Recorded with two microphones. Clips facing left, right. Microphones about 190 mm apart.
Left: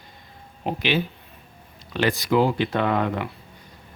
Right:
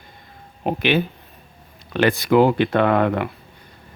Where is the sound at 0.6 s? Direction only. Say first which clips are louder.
Right 4 dB; 55° right (ahead or behind).